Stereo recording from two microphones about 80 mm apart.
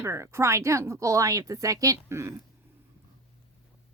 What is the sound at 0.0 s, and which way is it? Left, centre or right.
Speech, right.